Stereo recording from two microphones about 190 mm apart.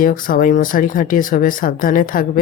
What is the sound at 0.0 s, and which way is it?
Speech, 45° left (ahead or behind).